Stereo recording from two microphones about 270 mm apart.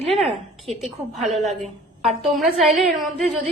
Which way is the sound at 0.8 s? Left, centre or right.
Centre.